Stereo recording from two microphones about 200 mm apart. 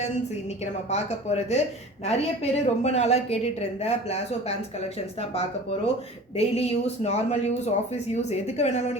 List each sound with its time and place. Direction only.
0.6 s a woman's voice: 35° left (ahead or behind)